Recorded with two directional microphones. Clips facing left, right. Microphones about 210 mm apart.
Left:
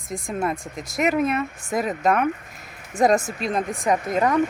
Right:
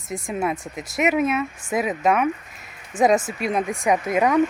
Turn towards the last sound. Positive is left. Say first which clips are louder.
# right 1 dB
turn(degrees=-10)  # may be behind; listen again after turning